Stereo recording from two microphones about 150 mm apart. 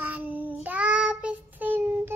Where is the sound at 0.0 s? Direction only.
10° right (ahead or behind).